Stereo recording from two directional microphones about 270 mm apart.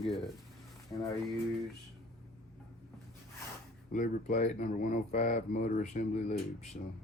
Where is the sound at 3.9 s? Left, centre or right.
Left.